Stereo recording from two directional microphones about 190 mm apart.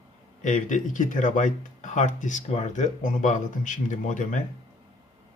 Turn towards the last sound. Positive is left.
turn(degrees=40)  # may be behind; listen again after turning